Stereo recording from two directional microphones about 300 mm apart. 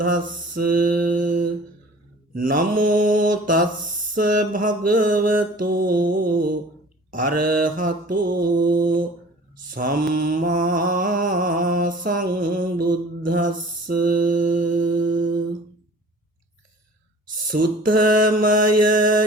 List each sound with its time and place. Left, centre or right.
0.8 s mantra: right
12.8 s mantra: right
13.3 s mantra: right
17.6 s a sound: right
18.0 s mantra: right